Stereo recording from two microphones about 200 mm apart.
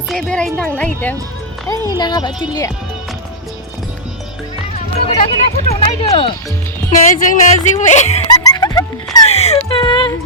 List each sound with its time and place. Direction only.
0.1 s a woman's voice: 5° left (ahead or behind)
1.7 s speech: 20° left (ahead or behind)
4.7 s speech: 30° left (ahead or behind)
6.9 s speech: 40° left (ahead or behind)
8.3 s music: 20° left (ahead or behind)
9.3 s speech: 30° left (ahead or behind)
9.6 s a sound: 25° left (ahead or behind)